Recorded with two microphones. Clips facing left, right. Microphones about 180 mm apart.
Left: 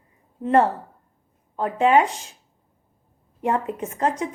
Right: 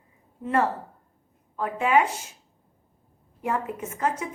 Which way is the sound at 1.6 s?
35° left (ahead or behind).